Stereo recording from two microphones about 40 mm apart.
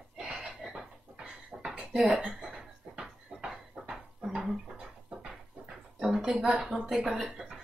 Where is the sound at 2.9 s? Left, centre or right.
Centre.